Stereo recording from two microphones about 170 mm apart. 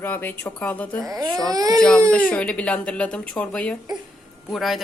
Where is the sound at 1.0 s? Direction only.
20° right (ahead or behind).